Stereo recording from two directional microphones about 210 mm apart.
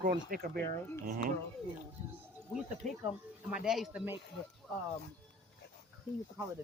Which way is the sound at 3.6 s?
Centre (ahead or behind).